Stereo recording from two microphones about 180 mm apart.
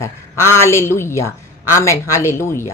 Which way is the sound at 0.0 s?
15° left (ahead or behind).